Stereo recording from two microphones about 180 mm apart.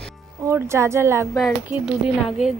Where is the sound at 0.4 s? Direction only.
15° right (ahead or behind).